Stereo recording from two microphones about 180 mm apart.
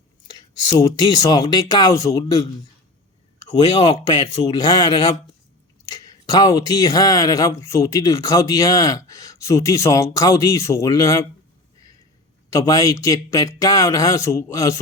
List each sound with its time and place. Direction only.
0.3 s speech: 25° left (ahead or behind)
3.6 s speech: 20° left (ahead or behind)
12.5 s speech: 20° left (ahead or behind)